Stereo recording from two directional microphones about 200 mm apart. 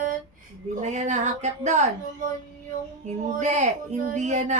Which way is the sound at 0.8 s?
35° right (ahead or behind).